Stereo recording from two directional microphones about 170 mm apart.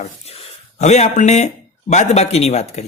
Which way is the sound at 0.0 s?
40° left (ahead or behind).